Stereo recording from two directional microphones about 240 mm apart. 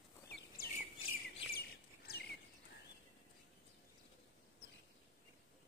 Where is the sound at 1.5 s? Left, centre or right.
Left.